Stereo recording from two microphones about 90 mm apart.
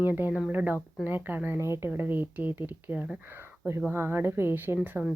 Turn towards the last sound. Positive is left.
turn(degrees=-10)  # may be behind; listen again after turning